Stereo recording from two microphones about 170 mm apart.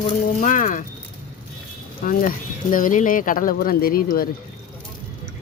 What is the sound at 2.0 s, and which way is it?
Speech, 55° left (ahead or behind).